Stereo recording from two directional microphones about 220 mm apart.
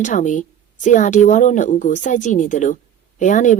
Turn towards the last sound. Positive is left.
turn(degrees=35)  # may be behind; listen again after turning